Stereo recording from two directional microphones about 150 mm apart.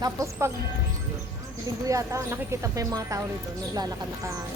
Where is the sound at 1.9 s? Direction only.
20° right (ahead or behind).